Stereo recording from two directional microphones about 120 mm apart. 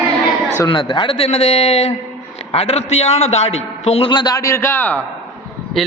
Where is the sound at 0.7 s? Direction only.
40° left (ahead or behind); by 4.1 s 60° left (ahead or behind).